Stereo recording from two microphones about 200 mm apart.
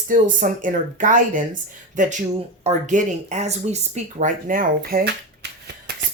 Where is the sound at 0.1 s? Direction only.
40° right (ahead or behind).